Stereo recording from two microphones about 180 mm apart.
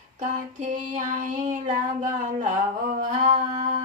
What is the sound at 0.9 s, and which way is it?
Female singing, 45° right (ahead or behind).